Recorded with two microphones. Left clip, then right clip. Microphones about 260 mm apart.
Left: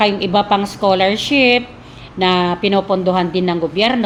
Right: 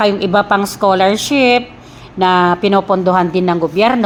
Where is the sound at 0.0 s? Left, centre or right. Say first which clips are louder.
Right 2 dB; right.